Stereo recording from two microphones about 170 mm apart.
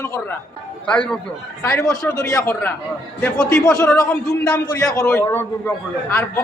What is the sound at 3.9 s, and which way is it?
A man's voice, 20° left (ahead or behind).